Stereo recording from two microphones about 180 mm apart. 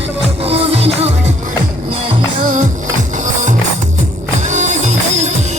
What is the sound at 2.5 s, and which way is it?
Music, 45° right (ahead or behind).